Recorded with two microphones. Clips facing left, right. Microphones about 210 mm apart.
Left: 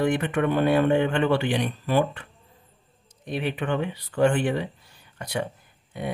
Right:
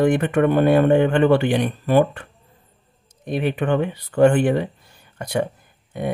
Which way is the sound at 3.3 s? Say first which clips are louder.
Right 6 dB; 50° right (ahead or behind).